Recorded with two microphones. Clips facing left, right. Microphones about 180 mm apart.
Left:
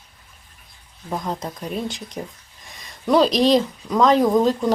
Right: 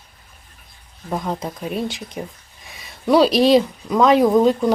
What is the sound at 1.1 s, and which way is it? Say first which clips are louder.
Speech: right 2 dB; 5° right (ahead or behind).